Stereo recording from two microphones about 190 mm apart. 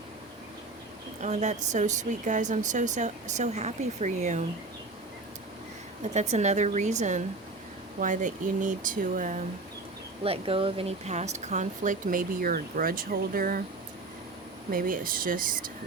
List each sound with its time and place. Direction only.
1.2 s speech: 35° right (ahead or behind)
6.0 s speech: 35° right (ahead or behind)
10.2 s speech: 30° right (ahead or behind); by 13.6 s 50° right (ahead or behind)
14.7 s speech: 45° right (ahead or behind)